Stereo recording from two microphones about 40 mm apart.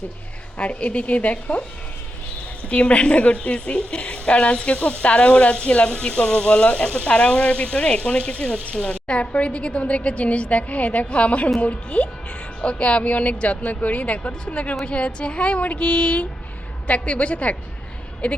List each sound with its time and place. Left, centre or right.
0.6 s a woman's voice: left
2.6 s a woman's voice: left